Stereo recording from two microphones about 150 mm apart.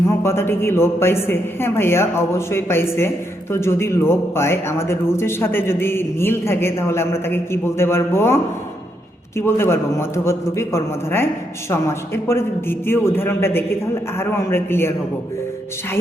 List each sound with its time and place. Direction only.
0.2 s speech: 15° left (ahead or behind)
9.4 s speech: 15° left (ahead or behind)